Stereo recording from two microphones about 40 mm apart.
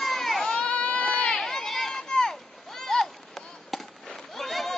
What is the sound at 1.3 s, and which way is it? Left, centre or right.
Run, centre.